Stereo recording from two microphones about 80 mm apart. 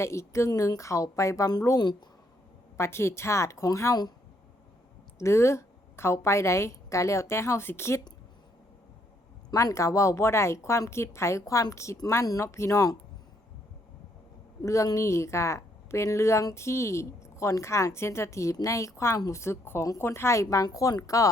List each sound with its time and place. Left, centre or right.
0.0 s a woman's voice: left
5.2 s a woman's voice: left
9.6 s a woman's voice: left
14.6 s a woman's voice: left